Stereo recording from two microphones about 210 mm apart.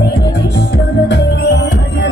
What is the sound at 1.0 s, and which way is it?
Music, 55° left (ahead or behind).